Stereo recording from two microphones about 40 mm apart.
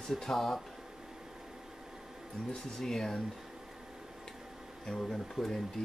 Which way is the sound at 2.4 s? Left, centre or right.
Centre.